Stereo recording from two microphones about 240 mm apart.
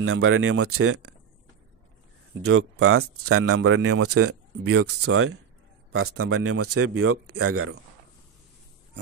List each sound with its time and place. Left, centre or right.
0.0 s speech: right
2.4 s speech: right